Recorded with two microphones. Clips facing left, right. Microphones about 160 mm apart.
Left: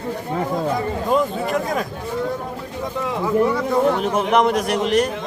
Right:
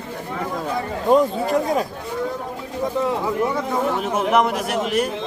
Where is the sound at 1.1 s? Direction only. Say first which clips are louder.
Right 4 dB; 35° right (ahead or behind).